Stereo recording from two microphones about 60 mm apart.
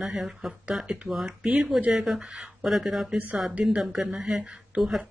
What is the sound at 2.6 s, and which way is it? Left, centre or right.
Speech, centre.